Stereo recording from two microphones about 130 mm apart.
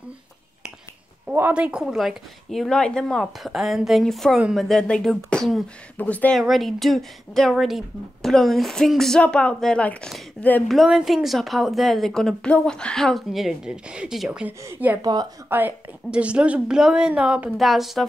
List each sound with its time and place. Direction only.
1.3 s speech: 15° right (ahead or behind); by 6.4 s 10° left (ahead or behind)
6.4 s speech: centre (ahead or behind)
14.6 s a woman's voice: 15° right (ahead or behind)
15.0 s a woman's voice: 30° right (ahead or behind)
15.5 s a woman's voice: 10° right (ahead or behind)